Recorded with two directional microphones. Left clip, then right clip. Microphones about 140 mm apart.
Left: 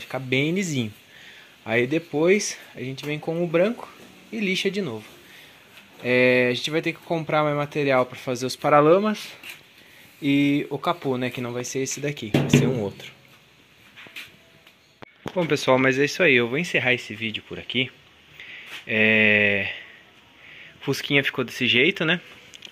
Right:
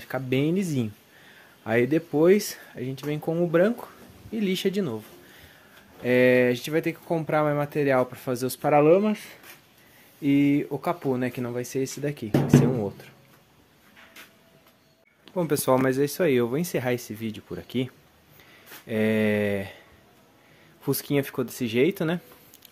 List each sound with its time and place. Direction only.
0.1 s speech: 25° right (ahead or behind)
1.6 s speech: 30° right (ahead or behind)
2.7 s speech: 20° right (ahead or behind)
6.0 s speech: 25° right (ahead or behind)
8.6 s speech: centre (ahead or behind)
10.2 s speech: 5° right (ahead or behind)
12.5 s speech: 5° right (ahead or behind)
15.3 s speech: 15° right (ahead or behind); by 17.9 s 50° right (ahead or behind)
18.9 s speech: 35° right (ahead or behind)
20.8 s speech: 30° right (ahead or behind)